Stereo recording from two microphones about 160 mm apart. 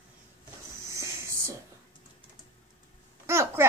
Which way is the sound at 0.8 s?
20° right (ahead or behind).